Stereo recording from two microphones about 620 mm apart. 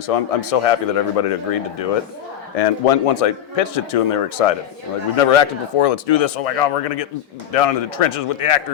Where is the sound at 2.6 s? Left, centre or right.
Left.